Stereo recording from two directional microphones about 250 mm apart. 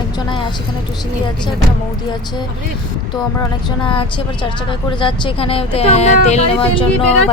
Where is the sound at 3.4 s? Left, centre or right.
Centre.